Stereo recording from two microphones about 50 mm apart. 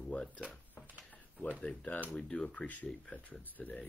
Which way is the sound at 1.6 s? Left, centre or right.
Centre.